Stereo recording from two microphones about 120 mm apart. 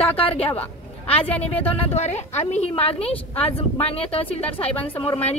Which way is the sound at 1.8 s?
65° left (ahead or behind).